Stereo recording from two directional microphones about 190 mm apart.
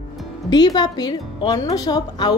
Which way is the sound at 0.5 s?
20° left (ahead or behind).